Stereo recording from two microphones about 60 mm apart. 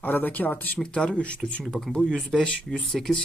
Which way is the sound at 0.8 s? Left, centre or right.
Centre.